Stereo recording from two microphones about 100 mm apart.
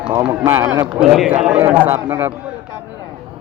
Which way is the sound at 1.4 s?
15° right (ahead or behind).